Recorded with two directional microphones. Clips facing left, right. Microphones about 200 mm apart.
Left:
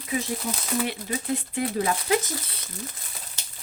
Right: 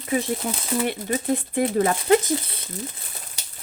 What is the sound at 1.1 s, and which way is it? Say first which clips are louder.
Speech: right 5 dB; 50° right (ahead or behind).